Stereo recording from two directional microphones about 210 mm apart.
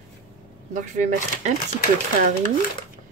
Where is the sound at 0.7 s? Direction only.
35° right (ahead or behind).